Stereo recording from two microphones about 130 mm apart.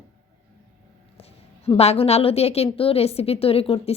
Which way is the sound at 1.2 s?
50° left (ahead or behind).